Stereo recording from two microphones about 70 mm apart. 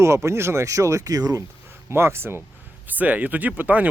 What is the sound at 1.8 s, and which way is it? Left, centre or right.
Speech, right.